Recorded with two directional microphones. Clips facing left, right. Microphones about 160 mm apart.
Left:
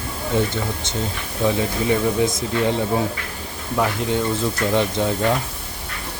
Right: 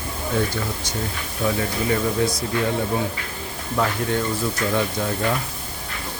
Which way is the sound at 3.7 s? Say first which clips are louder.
Left 1 dB; 15° left (ahead or behind).